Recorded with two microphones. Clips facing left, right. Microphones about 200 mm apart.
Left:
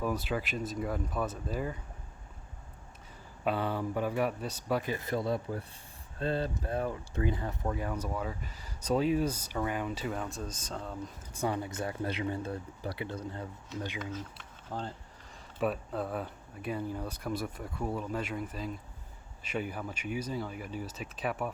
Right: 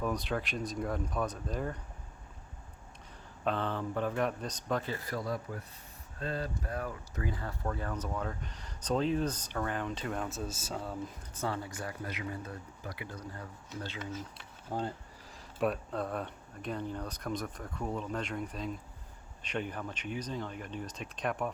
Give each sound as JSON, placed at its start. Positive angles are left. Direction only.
{"t": 0.0, "sound": "speech", "side_deg": 5}
{"t": 3.4, "sound": "speech", "side_deg": 10}
{"t": 11.3, "sound": "speech", "side_deg": 15}
{"t": 14.7, "sound": "speech", "side_deg": -10}
{"t": 15.3, "sound": "speech", "side_deg": 0}